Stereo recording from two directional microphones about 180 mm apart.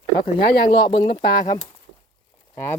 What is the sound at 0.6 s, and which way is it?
Speech, 25° left (ahead or behind).